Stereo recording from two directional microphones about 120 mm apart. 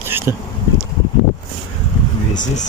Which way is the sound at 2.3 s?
90° left.